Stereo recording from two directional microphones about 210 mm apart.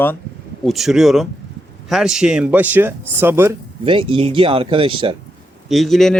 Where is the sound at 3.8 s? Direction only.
25° right (ahead or behind).